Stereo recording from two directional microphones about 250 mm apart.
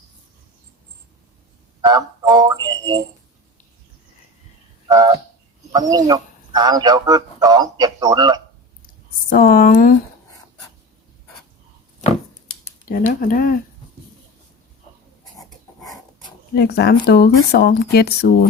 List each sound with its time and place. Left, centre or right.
1.8 s a man's voice: centre
4.9 s a man's voice: centre
9.3 s speech: left
12.9 s speech: left
16.6 s speech: left